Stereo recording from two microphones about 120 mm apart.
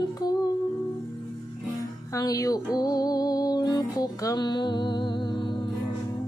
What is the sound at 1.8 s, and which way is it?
Music, 30° left (ahead or behind).